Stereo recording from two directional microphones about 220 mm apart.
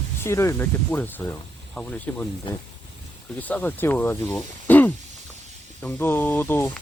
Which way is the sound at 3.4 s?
5° left (ahead or behind).